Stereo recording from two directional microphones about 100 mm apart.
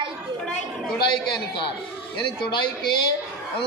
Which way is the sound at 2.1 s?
55° left (ahead or behind).